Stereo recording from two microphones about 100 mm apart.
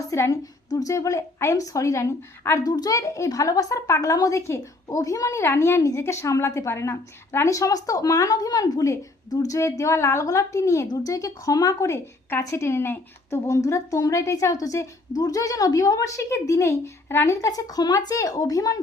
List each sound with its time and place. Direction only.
0.0 s a child's voice: 35° left (ahead or behind)
2.6 s a child's voice: 40° left (ahead or behind)